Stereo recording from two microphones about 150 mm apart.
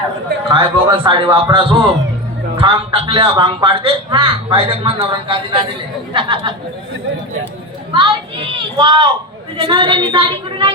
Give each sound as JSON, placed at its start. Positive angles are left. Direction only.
{"t": 0.5, "sound": "a man's voice", "side_deg": -35}
{"t": 7.9, "sound": "a man's voice", "side_deg": -35}